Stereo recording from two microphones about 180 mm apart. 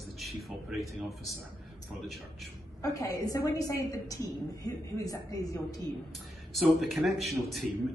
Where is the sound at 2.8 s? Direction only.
20° left (ahead or behind).